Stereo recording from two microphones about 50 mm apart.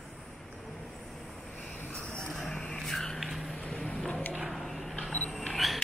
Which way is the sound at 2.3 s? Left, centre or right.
Centre.